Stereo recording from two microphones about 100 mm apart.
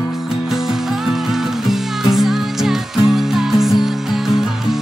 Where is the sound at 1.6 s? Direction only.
Centre (ahead or behind).